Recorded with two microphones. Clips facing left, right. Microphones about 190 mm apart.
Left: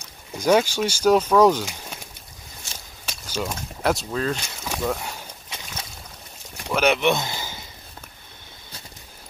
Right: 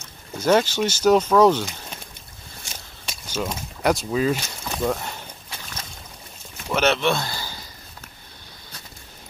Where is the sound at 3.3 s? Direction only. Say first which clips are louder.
Right 1 dB; 5° right (ahead or behind).